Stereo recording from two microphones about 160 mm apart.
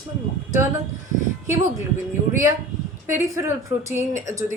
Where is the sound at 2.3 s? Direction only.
20° right (ahead or behind).